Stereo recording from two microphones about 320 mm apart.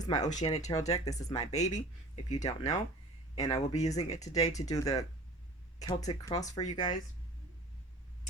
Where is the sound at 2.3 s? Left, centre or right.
Centre.